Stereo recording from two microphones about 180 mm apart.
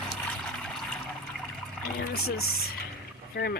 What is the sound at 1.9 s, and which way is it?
Speech, 60° left (ahead or behind).